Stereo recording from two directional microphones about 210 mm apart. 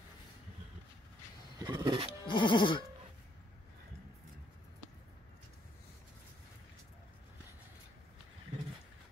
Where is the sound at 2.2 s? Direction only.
20° left (ahead or behind).